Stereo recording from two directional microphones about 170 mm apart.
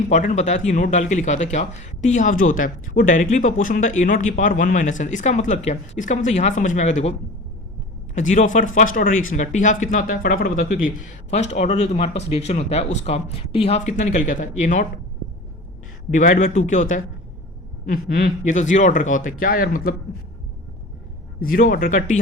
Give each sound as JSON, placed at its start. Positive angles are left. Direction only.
{"t": 0.0, "sound": "speech", "side_deg": 45}
{"t": 11.3, "sound": "speech", "side_deg": 45}
{"t": 16.1, "sound": "speech", "side_deg": 50}
{"t": 21.4, "sound": "speech", "side_deg": 55}